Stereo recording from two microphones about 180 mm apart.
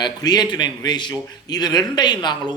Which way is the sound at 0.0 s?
25° left (ahead or behind).